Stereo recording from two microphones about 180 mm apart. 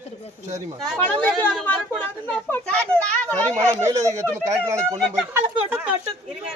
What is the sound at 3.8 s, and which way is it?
Speech, 20° right (ahead or behind).